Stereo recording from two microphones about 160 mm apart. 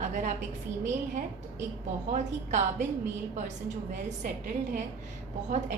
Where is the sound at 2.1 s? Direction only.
50° right (ahead or behind).